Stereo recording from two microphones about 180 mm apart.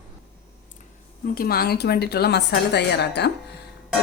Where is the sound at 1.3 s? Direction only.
55° left (ahead or behind).